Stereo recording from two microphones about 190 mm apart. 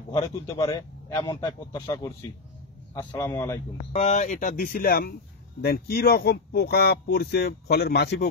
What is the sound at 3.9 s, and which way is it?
Speech, 40° left (ahead or behind).